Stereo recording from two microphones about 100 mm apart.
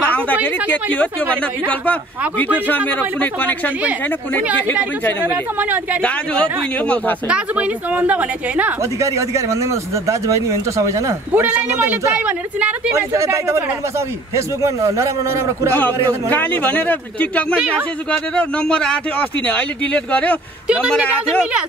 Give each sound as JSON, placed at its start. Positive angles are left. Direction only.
{"t": 0.1, "sound": "a man's voice", "side_deg": 15}
{"t": 5.2, "sound": "a woman's voice", "side_deg": -15}
{"t": 7.2, "sound": "a woman's voice", "side_deg": -10}
{"t": 9.0, "sound": "a man's voice", "side_deg": -30}
{"t": 12.9, "sound": "speech", "side_deg": -30}
{"t": 16.3, "sound": "a man's voice", "side_deg": 20}
{"t": 21.3, "sound": "a woman's voice", "side_deg": 0}